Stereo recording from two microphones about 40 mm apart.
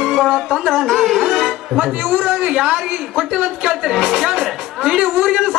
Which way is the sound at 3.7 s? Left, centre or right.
Centre.